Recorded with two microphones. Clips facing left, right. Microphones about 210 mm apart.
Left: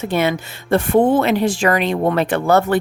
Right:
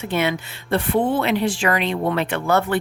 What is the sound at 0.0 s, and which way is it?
Speech, 40° left (ahead or behind).